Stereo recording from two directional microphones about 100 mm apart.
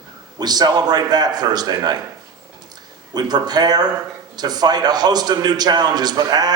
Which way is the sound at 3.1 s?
45° right (ahead or behind).